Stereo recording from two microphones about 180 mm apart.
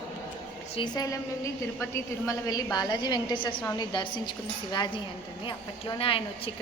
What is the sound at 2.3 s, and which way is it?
A woman's voice, 20° left (ahead or behind).